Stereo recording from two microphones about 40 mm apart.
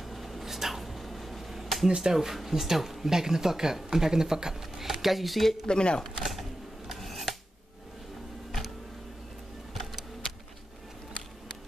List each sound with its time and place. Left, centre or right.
0.0 s a sound: centre
2.0 s speech: centre
5.7 s speech: left
6.0 s a sound: centre
6.9 s scissors: centre
8.5 s tick-tock: centre